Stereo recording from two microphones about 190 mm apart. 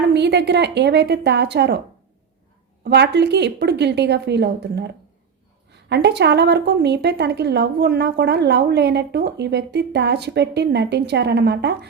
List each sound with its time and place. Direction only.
0.1 s a woman's voice: 65° right (ahead or behind)
2.8 s a woman's voice: 65° right (ahead or behind)